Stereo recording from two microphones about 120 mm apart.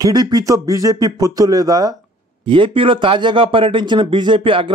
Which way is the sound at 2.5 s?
45° right (ahead or behind).